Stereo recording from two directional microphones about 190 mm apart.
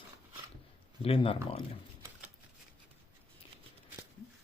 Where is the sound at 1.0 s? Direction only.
30° left (ahead or behind).